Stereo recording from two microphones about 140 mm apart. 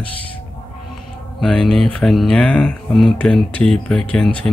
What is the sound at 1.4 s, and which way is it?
Speech, 5° left (ahead or behind).